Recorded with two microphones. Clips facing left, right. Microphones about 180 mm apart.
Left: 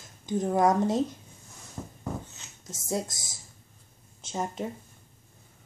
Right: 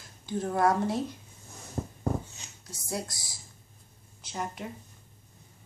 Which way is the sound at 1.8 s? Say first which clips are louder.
Right 5 dB; 35° right (ahead or behind).